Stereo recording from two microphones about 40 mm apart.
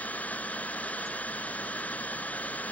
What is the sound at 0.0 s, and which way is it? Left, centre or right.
Jet engine, left.